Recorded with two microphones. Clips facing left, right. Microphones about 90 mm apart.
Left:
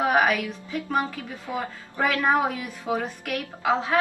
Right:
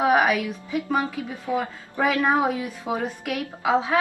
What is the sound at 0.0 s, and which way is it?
Music, 5° right (ahead or behind).